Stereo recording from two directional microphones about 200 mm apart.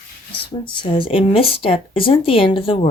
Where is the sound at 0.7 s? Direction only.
25° left (ahead or behind).